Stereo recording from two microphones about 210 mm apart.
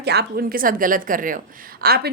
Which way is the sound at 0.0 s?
50° right (ahead or behind).